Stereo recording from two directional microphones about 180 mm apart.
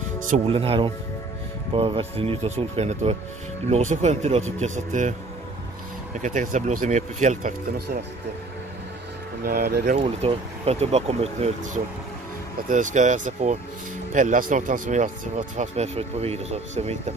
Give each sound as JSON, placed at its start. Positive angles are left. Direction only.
{"t": 0.5, "sound": "speech", "side_deg": -30}
{"t": 6.2, "sound": "speech", "side_deg": -45}
{"t": 9.4, "sound": "speech", "side_deg": -55}
{"t": 9.9, "sound": "speech", "side_deg": -35}